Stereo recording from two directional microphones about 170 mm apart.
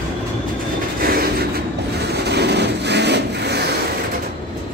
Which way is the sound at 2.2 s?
80° right.